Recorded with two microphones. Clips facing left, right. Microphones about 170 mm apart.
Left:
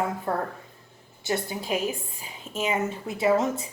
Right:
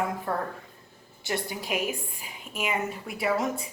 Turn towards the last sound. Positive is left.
turn(degrees=30)  # may be behind; listen again after turning